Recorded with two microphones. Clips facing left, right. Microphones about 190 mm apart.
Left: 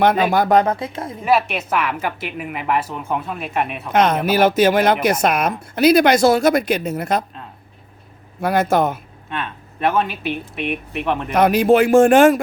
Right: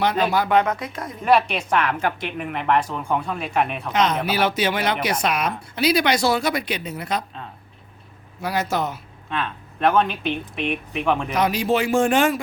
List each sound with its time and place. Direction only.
0.0 s speech: 50° left (ahead or behind); by 1.1 s 30° left (ahead or behind)
1.2 s speech: 5° left (ahead or behind)
3.9 s speech: 55° left (ahead or behind)
8.4 s speech: 55° left (ahead or behind)
9.3 s speech: 5° left (ahead or behind)
11.3 s speech: 55° left (ahead or behind)